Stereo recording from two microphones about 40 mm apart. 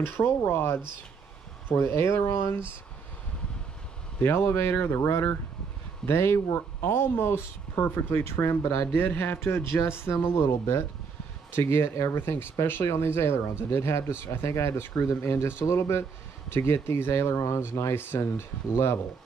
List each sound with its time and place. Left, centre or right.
0.0 s speech: left
4.2 s speech: left
6.0 s speech: left
8.9 s speech: left